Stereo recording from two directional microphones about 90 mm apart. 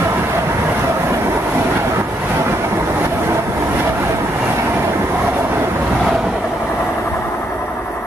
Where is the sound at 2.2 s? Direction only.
25° right (ahead or behind).